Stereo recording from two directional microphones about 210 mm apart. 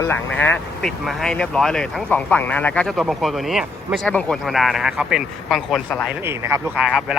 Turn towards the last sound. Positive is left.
turn(degrees=0)  # may be behind; listen again after turning